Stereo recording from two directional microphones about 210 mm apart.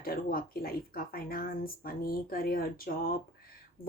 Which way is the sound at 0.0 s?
45° left (ahead or behind).